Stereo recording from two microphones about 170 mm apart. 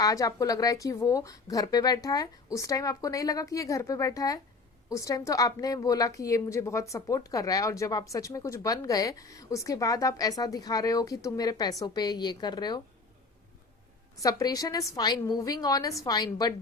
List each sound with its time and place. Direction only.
0.0 s a woman's voice: 20° left (ahead or behind)
14.2 s a woman's voice: 20° left (ahead or behind)